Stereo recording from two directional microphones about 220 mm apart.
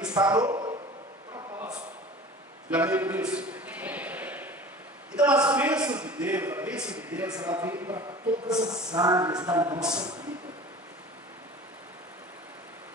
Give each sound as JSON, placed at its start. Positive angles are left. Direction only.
{"t": 0.1, "sound": "a man's voice", "side_deg": -15}
{"t": 1.3, "sound": "a sound", "side_deg": -15}
{"t": 5.1, "sound": "a man's voice", "side_deg": -5}